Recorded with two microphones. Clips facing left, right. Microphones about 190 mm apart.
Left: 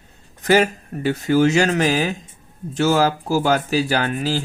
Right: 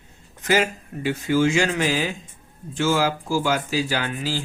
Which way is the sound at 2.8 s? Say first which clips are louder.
Left 4 dB; 40° left (ahead or behind).